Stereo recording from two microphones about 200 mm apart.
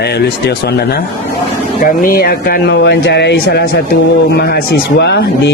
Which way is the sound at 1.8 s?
45° left (ahead or behind).